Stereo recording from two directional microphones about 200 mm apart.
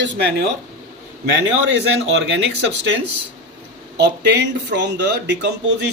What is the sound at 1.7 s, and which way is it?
Speech, 65° right (ahead or behind).